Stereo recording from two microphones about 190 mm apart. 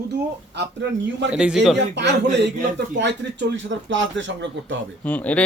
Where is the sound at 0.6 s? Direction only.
65° right (ahead or behind).